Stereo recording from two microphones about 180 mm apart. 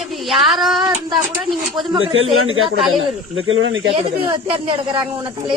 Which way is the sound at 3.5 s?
90° right.